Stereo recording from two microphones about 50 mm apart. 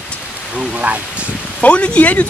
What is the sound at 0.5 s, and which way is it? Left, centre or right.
Rain on surface, right.